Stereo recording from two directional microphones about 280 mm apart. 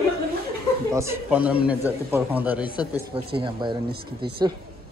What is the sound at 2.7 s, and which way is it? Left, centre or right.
Speech, centre.